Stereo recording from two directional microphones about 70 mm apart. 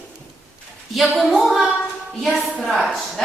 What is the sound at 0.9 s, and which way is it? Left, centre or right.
A woman's voice, centre.